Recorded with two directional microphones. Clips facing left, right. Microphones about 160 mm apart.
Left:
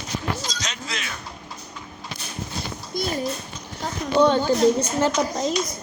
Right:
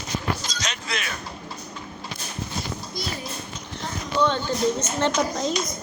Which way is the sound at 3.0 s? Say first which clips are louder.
Left 9 dB; 50° left (ahead or behind).